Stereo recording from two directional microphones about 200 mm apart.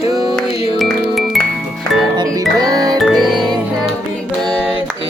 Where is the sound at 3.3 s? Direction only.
20° right (ahead or behind).